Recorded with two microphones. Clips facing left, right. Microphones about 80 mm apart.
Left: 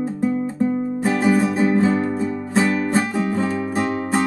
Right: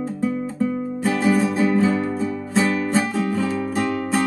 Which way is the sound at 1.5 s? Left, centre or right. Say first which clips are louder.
Left 1 dB; left.